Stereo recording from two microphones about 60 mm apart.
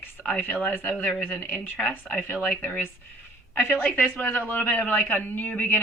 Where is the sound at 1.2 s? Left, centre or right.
Left.